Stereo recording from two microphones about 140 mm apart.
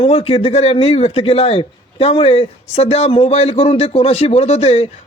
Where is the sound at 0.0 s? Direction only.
45° left (ahead or behind).